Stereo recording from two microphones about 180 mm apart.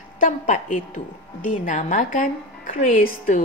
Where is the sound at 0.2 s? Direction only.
45° left (ahead or behind).